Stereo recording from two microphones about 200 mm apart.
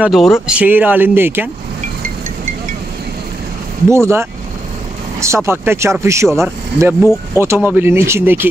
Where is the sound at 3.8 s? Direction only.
15° right (ahead or behind).